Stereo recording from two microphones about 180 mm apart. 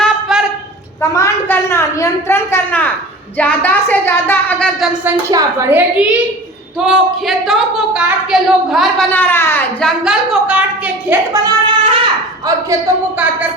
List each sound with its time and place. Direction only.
0.0 s a sound: centre (ahead or behind)
1.1 s a woman's voice: 15° left (ahead or behind)
5.3 s a woman's voice: 15° right (ahead or behind); by 9.0 s centre (ahead or behind)
9.1 s a woman's voice: 10° left (ahead or behind)
9.8 s a woman's voice: 5° right (ahead or behind)
11.4 s singing: 30° right (ahead or behind)